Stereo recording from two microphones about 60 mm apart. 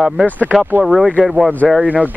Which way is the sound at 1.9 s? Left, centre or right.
Right.